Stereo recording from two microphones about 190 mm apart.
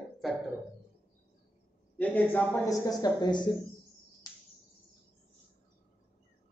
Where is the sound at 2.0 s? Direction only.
10° left (ahead or behind).